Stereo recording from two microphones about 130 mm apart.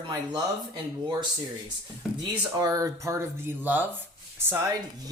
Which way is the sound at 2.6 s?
25° right (ahead or behind).